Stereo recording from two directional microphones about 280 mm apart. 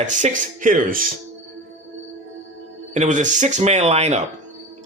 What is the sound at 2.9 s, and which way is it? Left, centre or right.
A man's voice, right.